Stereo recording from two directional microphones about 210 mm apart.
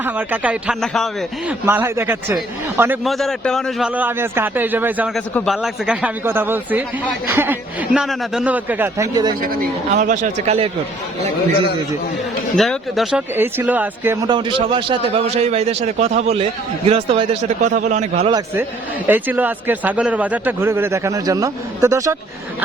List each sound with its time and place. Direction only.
0.0 s a man's voice: 10° right (ahead or behind)
1.6 s a man's voice: 10° right (ahead or behind)
9.5 s speech: 40° right (ahead or behind)
12.5 s a man's voice: centre (ahead or behind)
14.3 s a man's voice: 25° right (ahead or behind)
18.3 s a man's voice: 20° right (ahead or behind)